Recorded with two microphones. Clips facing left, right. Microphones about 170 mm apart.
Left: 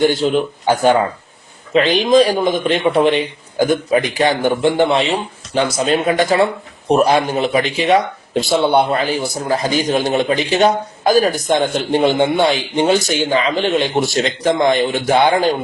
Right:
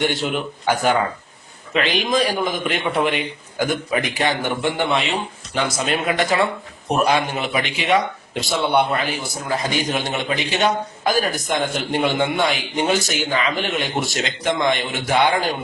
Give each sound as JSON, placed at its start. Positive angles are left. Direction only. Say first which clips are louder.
{"t": 0.0, "sound": "speech", "louder": "left 7 dB", "side_deg": 35}
{"t": 2.1, "sound": "speech", "louder": "left 10 dB", "side_deg": 25}